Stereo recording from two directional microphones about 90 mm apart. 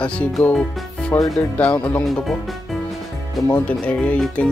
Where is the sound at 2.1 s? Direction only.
Centre (ahead or behind).